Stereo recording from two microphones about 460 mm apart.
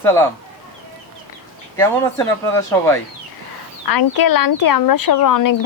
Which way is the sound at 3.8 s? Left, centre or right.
Left.